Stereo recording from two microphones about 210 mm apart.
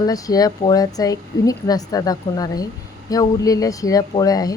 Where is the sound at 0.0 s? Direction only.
15° left (ahead or behind).